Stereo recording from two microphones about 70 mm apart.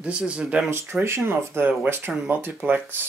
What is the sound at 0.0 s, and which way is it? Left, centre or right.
Speech, centre.